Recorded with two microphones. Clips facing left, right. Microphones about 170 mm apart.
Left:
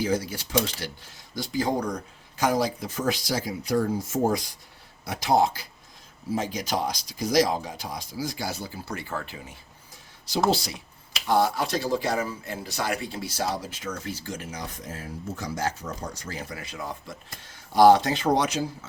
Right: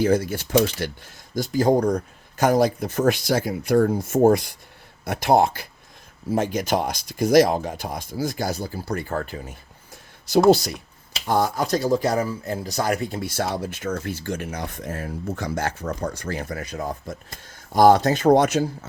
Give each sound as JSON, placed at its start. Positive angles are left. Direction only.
{"t": 0.0, "sound": "speech", "side_deg": -55}